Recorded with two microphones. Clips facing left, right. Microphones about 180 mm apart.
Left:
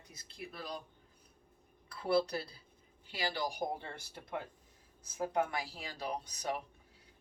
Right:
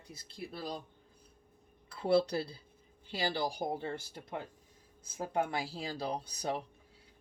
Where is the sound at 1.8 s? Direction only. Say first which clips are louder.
Right 3 dB; 25° right (ahead or behind).